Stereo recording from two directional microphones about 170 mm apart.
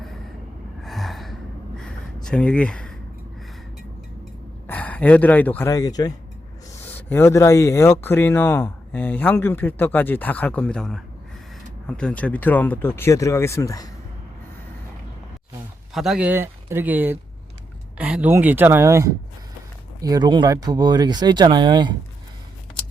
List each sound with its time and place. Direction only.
0.8 s gasp: centre (ahead or behind)
2.2 s speech: 5° left (ahead or behind)
4.6 s speech: 10° left (ahead or behind)
15.9 s speech: centre (ahead or behind); by 21.9 s 25° right (ahead or behind)